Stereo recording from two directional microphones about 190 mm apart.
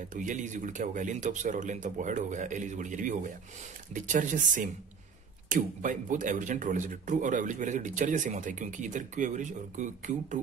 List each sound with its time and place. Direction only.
0.1 s speech: 40° right (ahead or behind)